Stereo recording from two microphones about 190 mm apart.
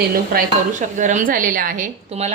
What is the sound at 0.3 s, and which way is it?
Speech, 40° right (ahead or behind).